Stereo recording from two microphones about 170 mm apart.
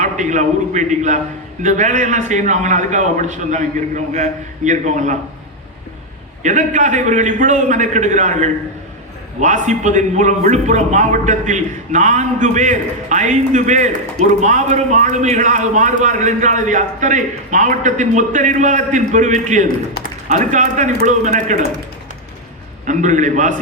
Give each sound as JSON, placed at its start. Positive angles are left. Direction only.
{"t": 0.0, "sound": "a man's voice", "side_deg": -45}
{"t": 6.4, "sound": "a man's voice", "side_deg": -45}
{"t": 22.9, "sound": "a man's voice", "side_deg": -45}